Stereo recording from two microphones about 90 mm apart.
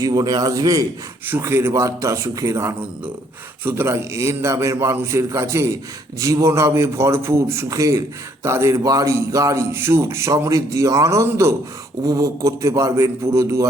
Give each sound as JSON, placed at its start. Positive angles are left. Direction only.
{"t": 0.0, "sound": "a man's voice", "side_deg": -45}
{"t": 1.3, "sound": "a man's voice", "side_deg": -30}
{"t": 9.7, "sound": "a man's voice", "side_deg": -30}